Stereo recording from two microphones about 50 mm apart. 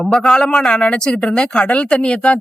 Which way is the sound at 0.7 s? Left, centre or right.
Left.